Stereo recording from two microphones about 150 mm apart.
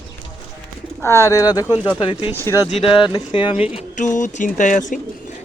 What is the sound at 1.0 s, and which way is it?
Speech, 20° left (ahead or behind).